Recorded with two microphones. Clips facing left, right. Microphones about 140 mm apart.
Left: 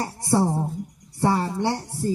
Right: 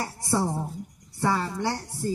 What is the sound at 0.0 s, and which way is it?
A woman's voice, 25° left (ahead or behind).